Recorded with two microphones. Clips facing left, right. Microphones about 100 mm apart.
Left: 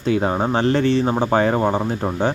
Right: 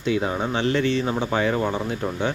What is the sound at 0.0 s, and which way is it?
Speech, 40° left (ahead or behind).